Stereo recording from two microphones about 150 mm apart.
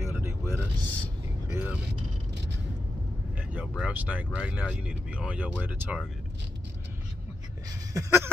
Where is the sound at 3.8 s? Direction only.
10° right (ahead or behind).